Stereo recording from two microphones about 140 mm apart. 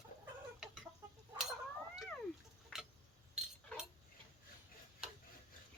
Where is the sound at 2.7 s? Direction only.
5° right (ahead or behind).